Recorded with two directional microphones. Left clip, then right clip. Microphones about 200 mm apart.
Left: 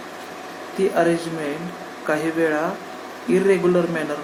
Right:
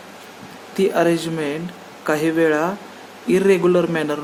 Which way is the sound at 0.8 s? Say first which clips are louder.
Right 2 dB; 45° right (ahead or behind).